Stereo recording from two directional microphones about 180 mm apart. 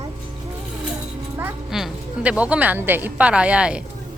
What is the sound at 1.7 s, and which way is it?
Speech, centre (ahead or behind).